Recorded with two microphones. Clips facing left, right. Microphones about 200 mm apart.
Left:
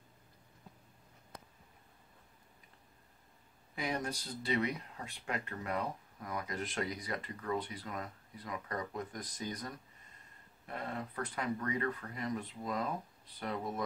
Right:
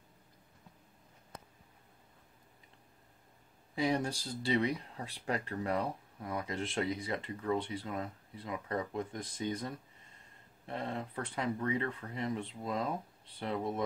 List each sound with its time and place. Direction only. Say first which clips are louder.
3.7 s speech: right 5 dB; 30° right (ahead or behind)